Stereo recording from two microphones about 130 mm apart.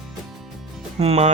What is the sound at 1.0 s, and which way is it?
Speech, 55° right (ahead or behind).